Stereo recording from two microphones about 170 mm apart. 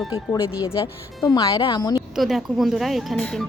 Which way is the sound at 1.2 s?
20° left (ahead or behind).